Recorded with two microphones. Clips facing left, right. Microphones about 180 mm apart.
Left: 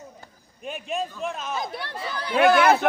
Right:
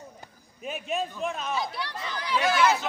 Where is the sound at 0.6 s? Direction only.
Centre (ahead or behind).